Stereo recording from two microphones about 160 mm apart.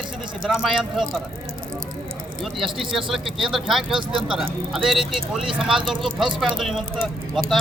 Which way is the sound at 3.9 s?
30° right (ahead or behind).